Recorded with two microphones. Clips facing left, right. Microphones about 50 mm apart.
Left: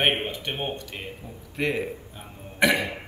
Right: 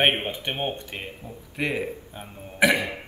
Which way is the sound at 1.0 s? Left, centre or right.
Centre.